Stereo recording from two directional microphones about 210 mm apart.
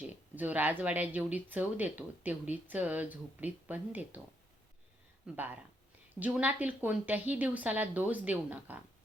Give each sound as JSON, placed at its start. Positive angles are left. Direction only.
{"t": 0.1, "sound": "a woman's voice", "side_deg": -10}
{"t": 5.2, "sound": "a woman's voice", "side_deg": -10}